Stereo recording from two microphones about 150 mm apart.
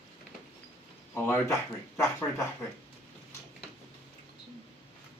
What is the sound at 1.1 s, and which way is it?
Speech, 20° left (ahead or behind).